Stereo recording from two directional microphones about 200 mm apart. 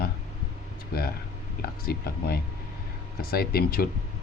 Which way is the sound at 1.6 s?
50° left (ahead or behind).